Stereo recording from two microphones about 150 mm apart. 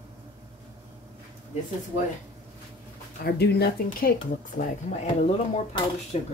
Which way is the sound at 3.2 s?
90° left.